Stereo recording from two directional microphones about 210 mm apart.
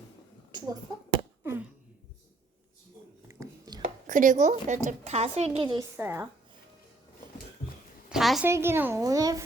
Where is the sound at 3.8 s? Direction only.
35° right (ahead or behind).